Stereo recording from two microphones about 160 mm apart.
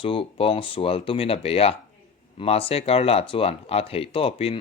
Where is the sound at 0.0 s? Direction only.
35° left (ahead or behind).